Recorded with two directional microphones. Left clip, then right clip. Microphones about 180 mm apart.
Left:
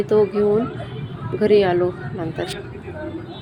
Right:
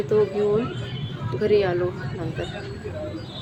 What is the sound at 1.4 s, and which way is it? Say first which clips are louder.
A woman's voice: left 5 dB; 15° left (ahead or behind).